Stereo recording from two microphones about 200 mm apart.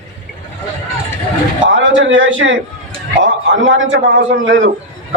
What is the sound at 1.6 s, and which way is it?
A man's voice, 75° right (ahead or behind).